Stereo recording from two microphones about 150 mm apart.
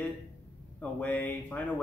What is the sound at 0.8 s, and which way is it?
Speech, 10° left (ahead or behind).